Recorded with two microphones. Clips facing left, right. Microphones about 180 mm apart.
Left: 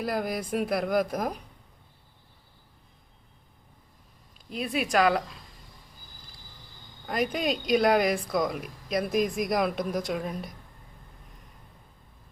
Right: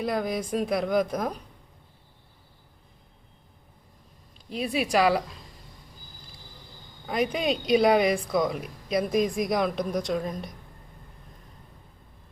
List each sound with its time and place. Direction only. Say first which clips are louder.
0.0 s a woman's voice: right 2 dB; 5° left (ahead or behind)
4.4 s a woman's voice: right 2 dB; centre (ahead or behind)
7.1 s a woman's voice: right 2 dB; centre (ahead or behind)